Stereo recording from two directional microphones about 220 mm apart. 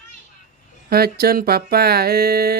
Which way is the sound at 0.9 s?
45° right (ahead or behind).